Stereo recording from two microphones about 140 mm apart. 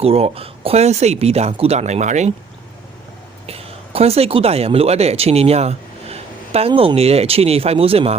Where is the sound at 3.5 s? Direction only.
45° right (ahead or behind).